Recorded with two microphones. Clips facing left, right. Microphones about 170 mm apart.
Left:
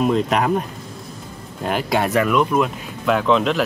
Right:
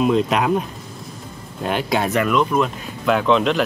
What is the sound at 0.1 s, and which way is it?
Speech, centre (ahead or behind).